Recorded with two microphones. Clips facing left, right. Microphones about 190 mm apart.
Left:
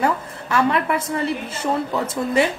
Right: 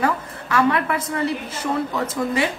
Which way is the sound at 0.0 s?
30° left (ahead or behind).